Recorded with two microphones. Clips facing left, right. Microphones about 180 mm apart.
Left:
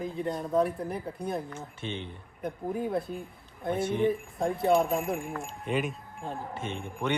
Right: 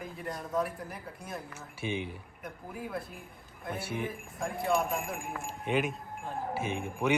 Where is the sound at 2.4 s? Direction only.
30° left (ahead or behind).